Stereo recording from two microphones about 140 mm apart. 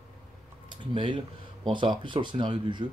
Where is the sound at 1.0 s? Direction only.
35° right (ahead or behind).